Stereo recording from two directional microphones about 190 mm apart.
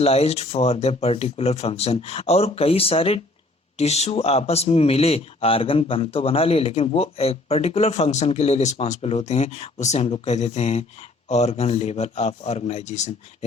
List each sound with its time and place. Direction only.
0.0 s speech: 35° left (ahead or behind)